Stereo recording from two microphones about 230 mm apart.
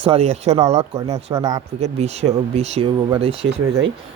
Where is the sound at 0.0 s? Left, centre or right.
Right.